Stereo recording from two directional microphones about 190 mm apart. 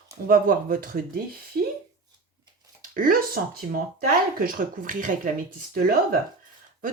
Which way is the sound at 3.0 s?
45° right (ahead or behind).